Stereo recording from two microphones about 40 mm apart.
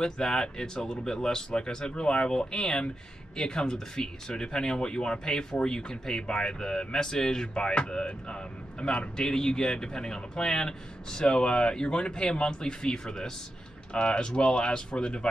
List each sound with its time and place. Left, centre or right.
0.0 s speech: centre